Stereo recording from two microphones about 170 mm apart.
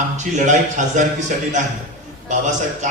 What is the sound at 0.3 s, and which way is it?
Speech, 45° right (ahead or behind).